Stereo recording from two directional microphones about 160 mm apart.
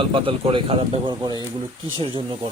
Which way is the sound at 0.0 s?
35° right (ahead or behind).